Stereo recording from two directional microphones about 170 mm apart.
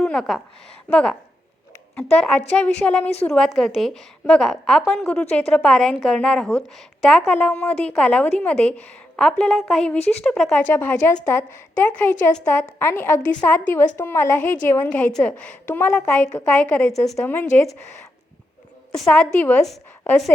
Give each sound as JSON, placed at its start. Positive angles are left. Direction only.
{"t": 0.0, "sound": "a woman's voice", "side_deg": 0}
{"t": 18.9, "sound": "a woman's voice", "side_deg": 5}